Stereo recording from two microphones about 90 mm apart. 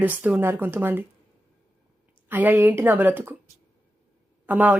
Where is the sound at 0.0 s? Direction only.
20° right (ahead or behind).